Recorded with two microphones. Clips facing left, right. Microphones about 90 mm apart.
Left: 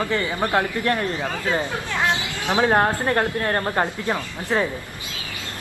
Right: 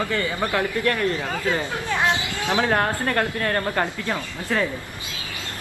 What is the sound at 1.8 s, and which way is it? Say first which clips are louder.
Speech: right 1 dB; 20° right (ahead or behind).